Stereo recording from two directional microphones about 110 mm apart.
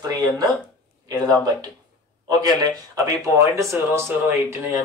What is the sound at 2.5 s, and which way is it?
Speech, 30° right (ahead or behind).